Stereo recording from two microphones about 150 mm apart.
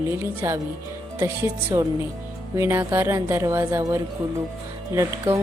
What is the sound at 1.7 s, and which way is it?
Speech, 25° right (ahead or behind).